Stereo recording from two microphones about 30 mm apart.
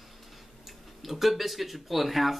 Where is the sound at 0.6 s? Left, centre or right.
Centre.